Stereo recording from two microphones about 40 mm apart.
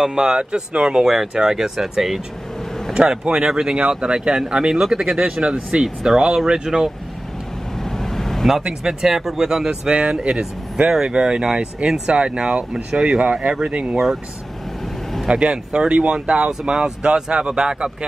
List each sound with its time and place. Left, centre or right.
0.0 s speech: centre
2.9 s speech: right
5.4 s speech: right
6.0 s speech: centre
7.8 s vehicle: centre
9.0 s speech: centre; by 13.9 s right
15.2 s speech: right